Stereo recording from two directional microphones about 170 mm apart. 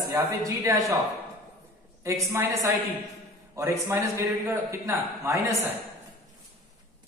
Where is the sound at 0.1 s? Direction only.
20° right (ahead or behind).